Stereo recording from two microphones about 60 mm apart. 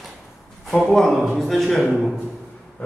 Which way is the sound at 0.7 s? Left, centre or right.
Centre.